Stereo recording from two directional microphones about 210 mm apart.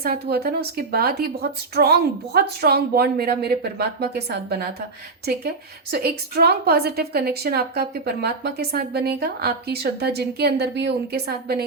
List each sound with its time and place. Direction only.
0.0 s a woman's voice: 45° right (ahead or behind)
5.9 s a woman's voice: 50° right (ahead or behind)